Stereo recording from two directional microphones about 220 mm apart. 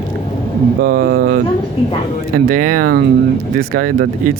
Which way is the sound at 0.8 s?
40° right (ahead or behind).